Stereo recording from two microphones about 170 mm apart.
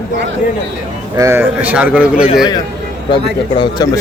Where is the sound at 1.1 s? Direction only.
15° right (ahead or behind).